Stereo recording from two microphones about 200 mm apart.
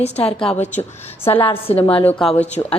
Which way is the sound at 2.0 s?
5° left (ahead or behind).